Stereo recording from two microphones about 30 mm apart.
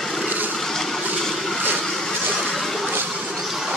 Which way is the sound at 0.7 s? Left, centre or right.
Centre.